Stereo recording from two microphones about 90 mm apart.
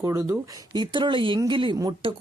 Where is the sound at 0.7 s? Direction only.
60° right (ahead or behind).